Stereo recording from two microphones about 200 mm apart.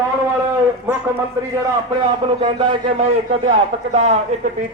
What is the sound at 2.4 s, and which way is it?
Speech, 25° right (ahead or behind).